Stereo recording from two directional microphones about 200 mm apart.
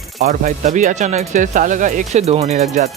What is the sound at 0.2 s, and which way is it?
Speech, 35° right (ahead or behind).